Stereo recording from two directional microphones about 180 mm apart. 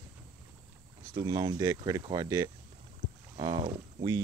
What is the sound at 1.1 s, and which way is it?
Speech, 20° right (ahead or behind).